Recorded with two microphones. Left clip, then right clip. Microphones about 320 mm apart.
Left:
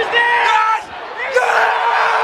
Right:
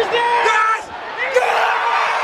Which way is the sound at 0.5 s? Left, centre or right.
Centre.